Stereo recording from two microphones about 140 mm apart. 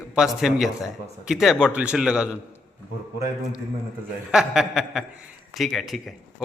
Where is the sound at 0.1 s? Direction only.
5° right (ahead or behind).